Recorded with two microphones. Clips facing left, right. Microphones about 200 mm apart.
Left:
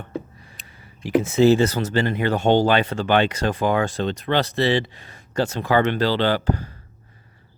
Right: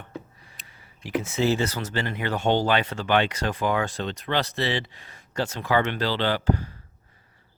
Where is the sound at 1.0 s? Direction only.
30° left (ahead or behind).